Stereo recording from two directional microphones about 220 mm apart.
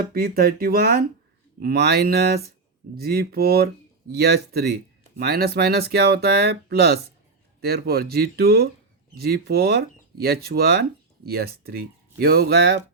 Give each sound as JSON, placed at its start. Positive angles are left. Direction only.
{"t": 0.0, "sound": "speech", "side_deg": -45}